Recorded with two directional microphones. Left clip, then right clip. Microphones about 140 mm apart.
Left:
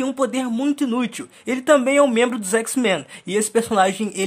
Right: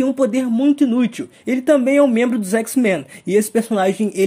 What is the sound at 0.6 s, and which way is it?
Speech, 25° left (ahead or behind).